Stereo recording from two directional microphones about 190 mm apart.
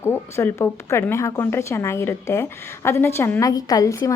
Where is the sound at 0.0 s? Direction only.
15° left (ahead or behind).